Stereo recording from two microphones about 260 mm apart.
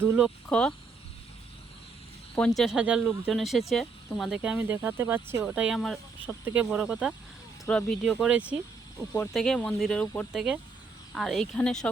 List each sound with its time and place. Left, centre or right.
0.0 s speech: centre
0.4 s speech: centre
2.3 s speech: centre
9.1 s speech: centre